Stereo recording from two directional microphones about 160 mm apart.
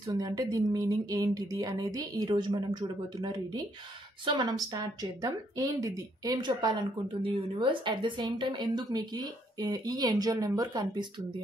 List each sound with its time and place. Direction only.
0.0 s speech: 25° right (ahead or behind)